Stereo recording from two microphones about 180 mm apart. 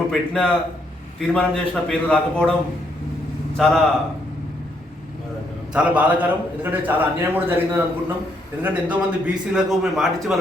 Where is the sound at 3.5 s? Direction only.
Centre (ahead or behind).